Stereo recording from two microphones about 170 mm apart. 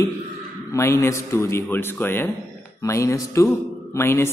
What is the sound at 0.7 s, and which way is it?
Speech, 15° left (ahead or behind).